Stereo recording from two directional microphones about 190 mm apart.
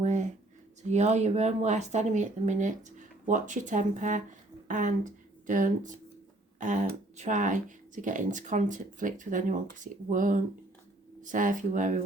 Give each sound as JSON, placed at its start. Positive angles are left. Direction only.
{"t": 0.0, "sound": "a sound", "side_deg": -40}
{"t": 0.8, "sound": "speech", "side_deg": -35}
{"t": 7.2, "sound": "speech", "side_deg": -40}